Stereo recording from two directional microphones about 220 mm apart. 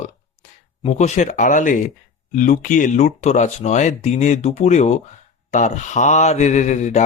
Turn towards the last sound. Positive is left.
turn(degrees=30)  # may be behind; listen again after turning